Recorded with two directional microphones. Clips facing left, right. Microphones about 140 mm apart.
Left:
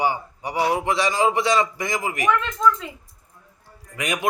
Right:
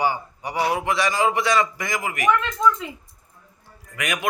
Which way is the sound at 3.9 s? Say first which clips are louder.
Left 1 dB; 30° left (ahead or behind).